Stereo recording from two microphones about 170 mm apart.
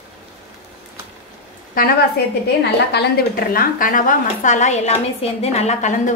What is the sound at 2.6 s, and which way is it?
A woman's voice, 70° left (ahead or behind).